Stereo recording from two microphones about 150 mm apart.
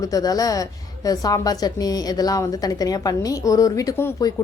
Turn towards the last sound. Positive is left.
turn(degrees=20)  # may be behind; listen again after turning